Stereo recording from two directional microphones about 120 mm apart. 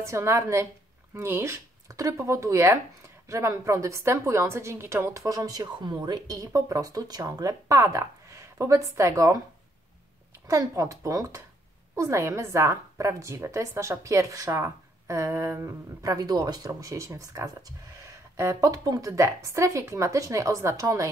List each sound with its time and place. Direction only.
0.0 s a woman's voice: 25° right (ahead or behind)
10.5 s a woman's voice: 25° right (ahead or behind)